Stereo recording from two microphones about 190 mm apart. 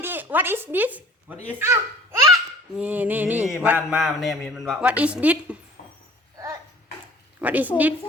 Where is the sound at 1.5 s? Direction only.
10° right (ahead or behind).